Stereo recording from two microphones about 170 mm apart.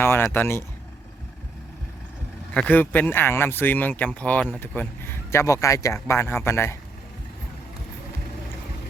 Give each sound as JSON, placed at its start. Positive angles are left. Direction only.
{"t": 0.0, "sound": "speech", "side_deg": 15}
{"t": 2.5, "sound": "speech", "side_deg": 10}